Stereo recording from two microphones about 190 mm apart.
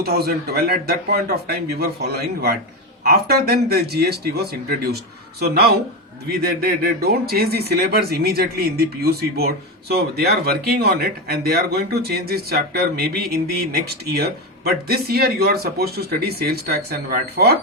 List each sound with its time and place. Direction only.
0.0 s speech: 55° right (ahead or behind)